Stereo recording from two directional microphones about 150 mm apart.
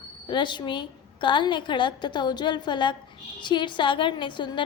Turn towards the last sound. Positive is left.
turn(degrees=30)  # may be behind; listen again after turning